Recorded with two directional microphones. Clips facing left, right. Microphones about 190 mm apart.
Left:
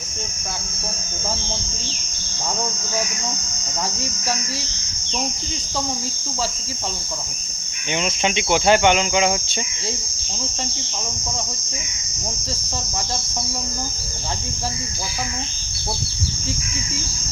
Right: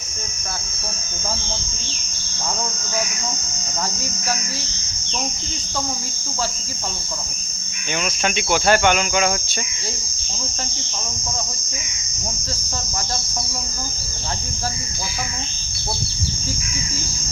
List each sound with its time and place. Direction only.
7.9 s cricket: 20° left (ahead or behind)